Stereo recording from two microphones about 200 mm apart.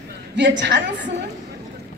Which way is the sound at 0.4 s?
60° right (ahead or behind).